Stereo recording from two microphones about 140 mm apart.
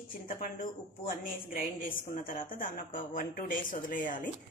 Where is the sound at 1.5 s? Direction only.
85° left.